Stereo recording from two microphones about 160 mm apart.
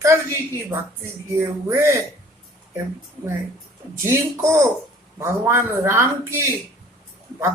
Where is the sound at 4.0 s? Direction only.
15° right (ahead or behind).